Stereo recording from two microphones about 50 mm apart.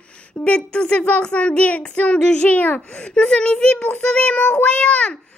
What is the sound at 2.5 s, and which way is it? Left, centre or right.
Child singing, left.